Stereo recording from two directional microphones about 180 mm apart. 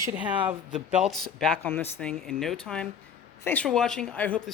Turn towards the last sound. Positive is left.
turn(degrees=5)  # may be behind; listen again after turning